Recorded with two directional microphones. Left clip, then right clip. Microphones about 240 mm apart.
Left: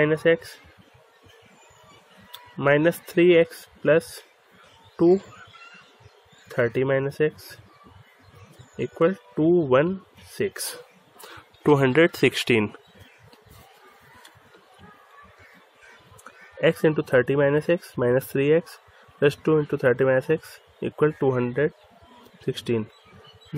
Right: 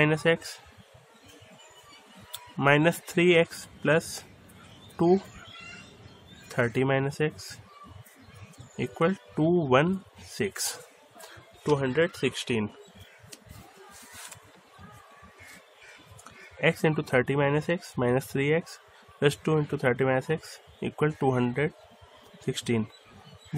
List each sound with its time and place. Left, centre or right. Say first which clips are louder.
0.0 s speech: left 4 dB; centre
2.3 s speech: left 2 dB; centre
6.5 s speech: left 4 dB; centre
8.7 s speech: left 5 dB; centre
11.6 s speech: left 7 dB; left
16.6 s speech: left 5 dB; centre